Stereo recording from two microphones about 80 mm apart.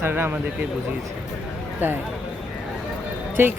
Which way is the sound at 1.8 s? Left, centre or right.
Right.